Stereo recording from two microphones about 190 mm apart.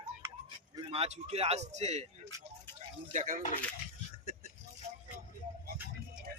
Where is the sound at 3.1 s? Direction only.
40° right (ahead or behind).